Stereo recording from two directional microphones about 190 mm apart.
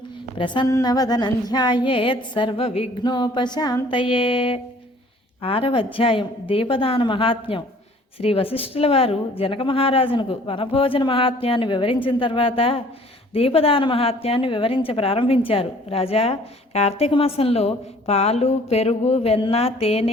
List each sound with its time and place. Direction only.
0.3 s a woman's voice: 25° left (ahead or behind)